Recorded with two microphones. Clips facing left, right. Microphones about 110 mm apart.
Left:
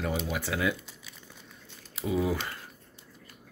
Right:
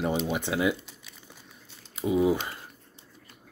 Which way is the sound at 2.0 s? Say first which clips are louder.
Right 5 dB; 20° right (ahead or behind).